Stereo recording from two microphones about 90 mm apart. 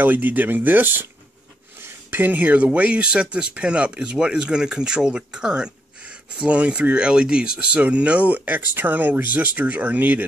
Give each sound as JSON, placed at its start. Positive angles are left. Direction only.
{"t": 0.0, "sound": "speech", "side_deg": -20}
{"t": 2.0, "sound": "speech", "side_deg": -20}